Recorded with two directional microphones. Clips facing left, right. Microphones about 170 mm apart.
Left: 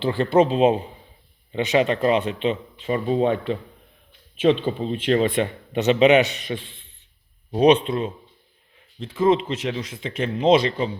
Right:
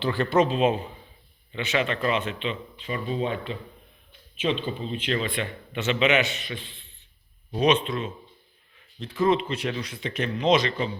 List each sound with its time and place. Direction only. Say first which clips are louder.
0.0 s speech: left 4 dB; 30° left (ahead or behind); by 3.6 s 50° left (ahead or behind)
4.8 s speech: left 8 dB; 50° left (ahead or behind)
7.5 s speech: left 6 dB; 35° left (ahead or behind)
9.0 s a man's voice: left 4 dB; 25° left (ahead or behind)